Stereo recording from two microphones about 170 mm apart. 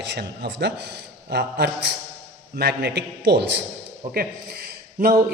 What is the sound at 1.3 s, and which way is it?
A man's voice, 75° right (ahead or behind).